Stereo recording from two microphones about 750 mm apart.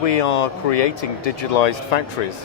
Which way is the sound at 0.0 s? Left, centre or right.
Left.